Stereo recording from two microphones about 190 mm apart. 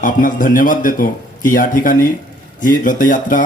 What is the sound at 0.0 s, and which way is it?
A man's voice, 45° left (ahead or behind).